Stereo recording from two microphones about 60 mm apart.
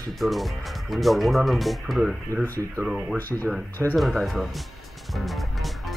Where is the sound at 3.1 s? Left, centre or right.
Left.